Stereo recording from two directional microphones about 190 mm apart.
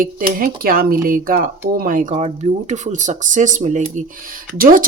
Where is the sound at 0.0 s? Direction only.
50° right (ahead or behind).